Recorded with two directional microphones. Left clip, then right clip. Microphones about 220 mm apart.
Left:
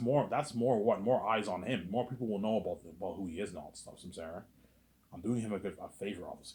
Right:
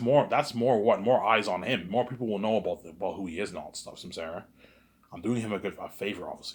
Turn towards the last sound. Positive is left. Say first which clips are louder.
# right 7 dB
turn(degrees=-25)  # may be behind; listen again after turning